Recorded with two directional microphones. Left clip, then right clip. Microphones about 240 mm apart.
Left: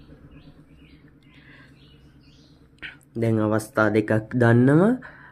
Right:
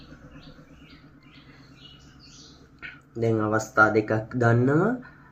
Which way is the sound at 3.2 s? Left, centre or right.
Left.